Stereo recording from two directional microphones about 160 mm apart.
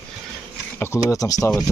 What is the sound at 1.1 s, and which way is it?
Speech, 20° left (ahead or behind).